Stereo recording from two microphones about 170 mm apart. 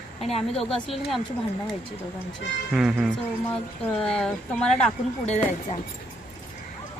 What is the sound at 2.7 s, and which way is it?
Speech, 5° right (ahead or behind).